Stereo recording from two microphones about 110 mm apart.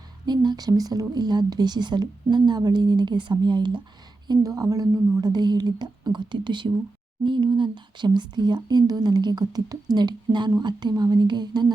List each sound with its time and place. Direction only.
0.3 s speech: 40° right (ahead or behind)
4.3 s speech: 35° right (ahead or behind)